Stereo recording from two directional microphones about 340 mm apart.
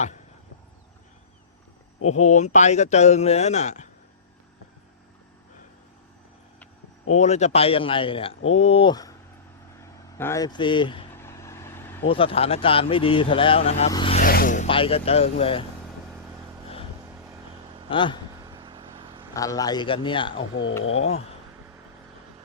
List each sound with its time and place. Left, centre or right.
2.0 s speech: left
7.1 s a man's voice: centre
10.2 s speech: centre
17.8 s a man's voice: centre
18.4 s vehicle: centre
19.3 s a man's voice: centre
20.5 s speech: left